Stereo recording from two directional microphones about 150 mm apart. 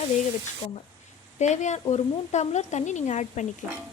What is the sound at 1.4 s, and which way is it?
Speech, 50° left (ahead or behind).